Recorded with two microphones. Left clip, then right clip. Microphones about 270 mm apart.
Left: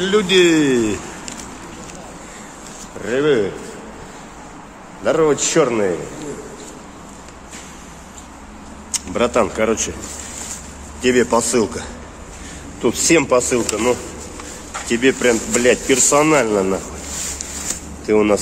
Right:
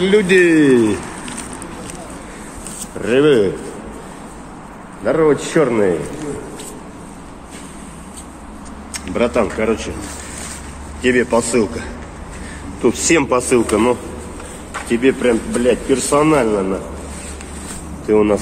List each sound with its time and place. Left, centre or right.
0.4 s speech: centre
3.1 s a man's voice: centre
5.0 s a man's voice: centre
8.9 s speech: centre
11.0 s speech: left
12.8 s speech: centre
14.9 s speech: centre
18.0 s a man's voice: centre